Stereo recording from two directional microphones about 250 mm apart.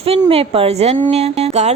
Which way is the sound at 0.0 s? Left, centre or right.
Right.